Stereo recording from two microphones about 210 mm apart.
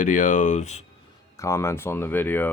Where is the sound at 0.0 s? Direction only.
35° left (ahead or behind).